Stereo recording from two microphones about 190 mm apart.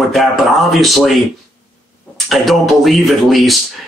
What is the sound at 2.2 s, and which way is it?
Speech, centre (ahead or behind).